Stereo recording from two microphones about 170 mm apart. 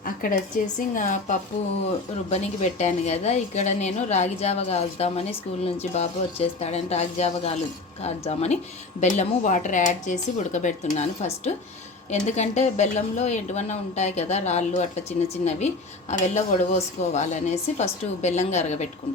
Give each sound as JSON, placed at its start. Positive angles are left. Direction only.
{"t": 0.0, "sound": "a woman's voice", "side_deg": 55}